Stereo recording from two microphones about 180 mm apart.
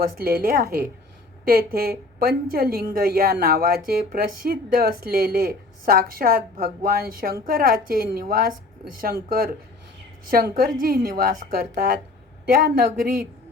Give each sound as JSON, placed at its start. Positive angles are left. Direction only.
{"t": 0.2, "sound": "a woman's voice", "side_deg": -55}